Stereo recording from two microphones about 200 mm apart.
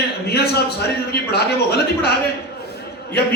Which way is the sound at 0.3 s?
55° left (ahead or behind).